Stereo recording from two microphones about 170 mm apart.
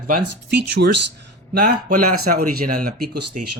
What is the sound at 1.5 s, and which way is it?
Speech, 60° right (ahead or behind).